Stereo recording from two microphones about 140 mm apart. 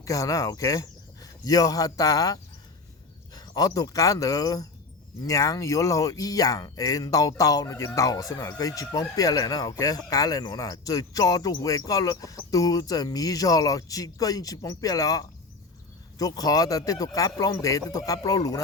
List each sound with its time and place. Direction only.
0.0 s speech: 25° left (ahead or behind)